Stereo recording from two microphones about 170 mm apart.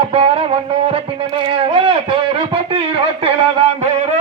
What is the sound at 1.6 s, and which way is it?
A man's voice, 30° right (ahead or behind).